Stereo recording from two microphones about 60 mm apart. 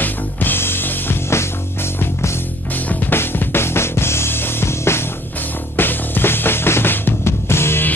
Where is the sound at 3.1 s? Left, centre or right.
Left.